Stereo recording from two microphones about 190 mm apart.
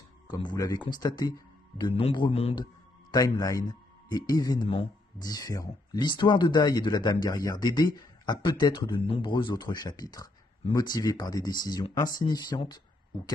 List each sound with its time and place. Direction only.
0.3 s a man's voice: 25° left (ahead or behind)